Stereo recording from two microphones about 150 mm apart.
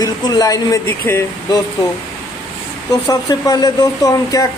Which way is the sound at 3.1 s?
25° left (ahead or behind).